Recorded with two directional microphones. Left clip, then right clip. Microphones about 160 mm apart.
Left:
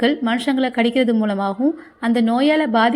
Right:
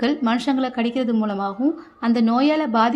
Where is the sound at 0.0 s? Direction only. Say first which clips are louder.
Left 2 dB; 5° left (ahead or behind).